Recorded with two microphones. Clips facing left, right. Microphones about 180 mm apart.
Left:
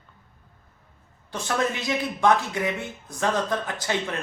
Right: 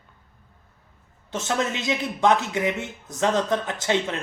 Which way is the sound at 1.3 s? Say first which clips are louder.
Even; 20° right (ahead or behind).